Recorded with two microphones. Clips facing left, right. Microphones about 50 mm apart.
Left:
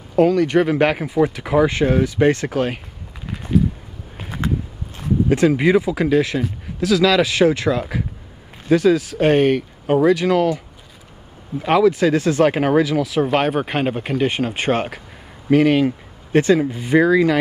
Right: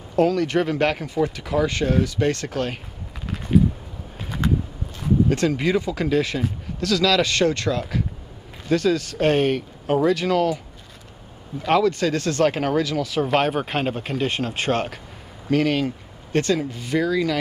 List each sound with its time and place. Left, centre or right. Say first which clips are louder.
0.1 s speech: left 4 dB; centre
4.2 s walk: left 1 dB; centre
5.3 s speech: left 6 dB; centre
11.6 s speech: left 4 dB; centre; by 17.4 s left